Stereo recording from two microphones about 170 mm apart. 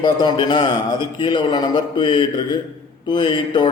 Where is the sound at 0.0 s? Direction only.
25° left (ahead or behind).